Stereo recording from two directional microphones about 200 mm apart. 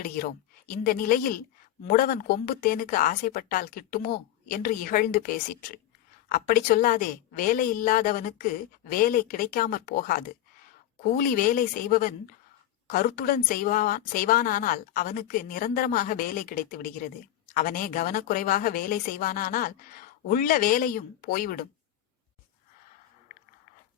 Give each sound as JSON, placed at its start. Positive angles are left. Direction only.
{"t": 0.0, "sound": "a woman's voice", "side_deg": 45}